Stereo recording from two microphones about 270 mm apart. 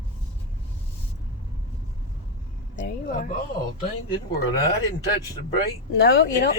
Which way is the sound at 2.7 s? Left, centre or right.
Left.